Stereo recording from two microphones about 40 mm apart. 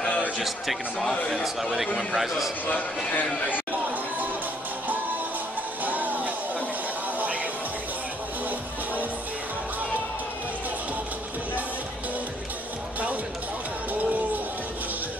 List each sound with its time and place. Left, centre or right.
1.3 s a man's voice: centre
5.9 s music: right